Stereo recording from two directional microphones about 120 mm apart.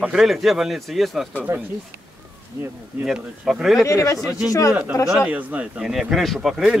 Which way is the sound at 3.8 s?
25° left (ahead or behind).